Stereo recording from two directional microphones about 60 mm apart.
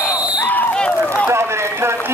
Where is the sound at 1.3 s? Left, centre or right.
Right.